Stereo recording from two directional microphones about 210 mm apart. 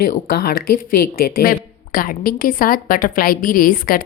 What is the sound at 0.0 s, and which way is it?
A woman's voice, 45° left (ahead or behind).